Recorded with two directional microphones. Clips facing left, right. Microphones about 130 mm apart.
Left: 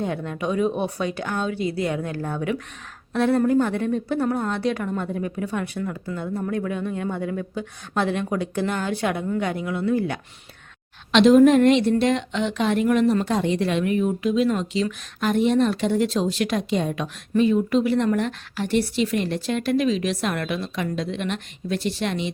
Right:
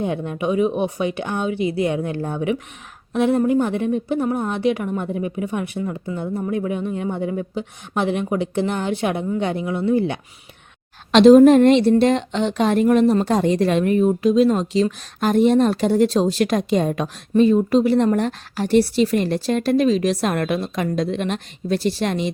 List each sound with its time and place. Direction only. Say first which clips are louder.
0.0 s a woman's voice: right 3 dB; 20° right (ahead or behind)
11.1 s speech: right 5 dB; 35° right (ahead or behind)